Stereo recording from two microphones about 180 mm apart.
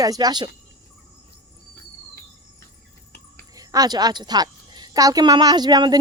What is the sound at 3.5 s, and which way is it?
A woman's voice, 20° right (ahead or behind).